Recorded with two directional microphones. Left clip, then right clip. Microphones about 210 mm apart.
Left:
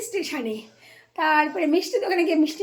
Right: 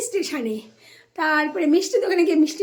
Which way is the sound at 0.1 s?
15° right (ahead or behind).